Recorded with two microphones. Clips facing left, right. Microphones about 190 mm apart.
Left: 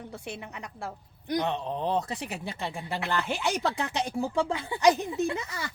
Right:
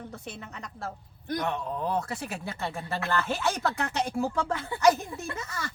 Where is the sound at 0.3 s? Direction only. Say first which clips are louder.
Left 2 dB; 15° left (ahead or behind).